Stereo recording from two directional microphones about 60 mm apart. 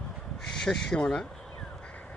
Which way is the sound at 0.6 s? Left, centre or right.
Centre.